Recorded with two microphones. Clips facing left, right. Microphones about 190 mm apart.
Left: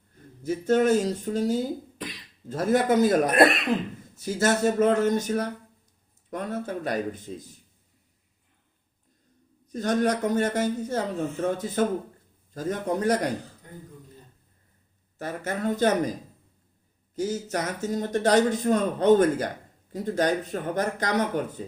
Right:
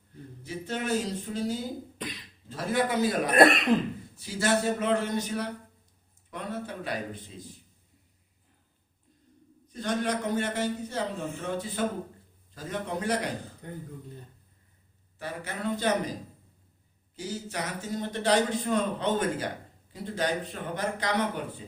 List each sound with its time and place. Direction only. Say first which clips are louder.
0.4 s a man's voice: left 11 dB; 45° left (ahead or behind)
3.3 s speech: even; centre (ahead or behind)
4.2 s a man's voice: left 4 dB; 45° left (ahead or behind)
9.6 s a man's voice: left 6 dB; 45° left (ahead or behind)
15.2 s a man's voice: left 5 dB; 45° left (ahead or behind)
17.2 s a man's voice: left 7 dB; 45° left (ahead or behind)